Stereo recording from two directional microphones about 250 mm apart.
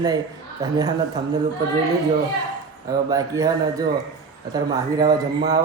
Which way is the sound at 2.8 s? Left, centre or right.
Centre.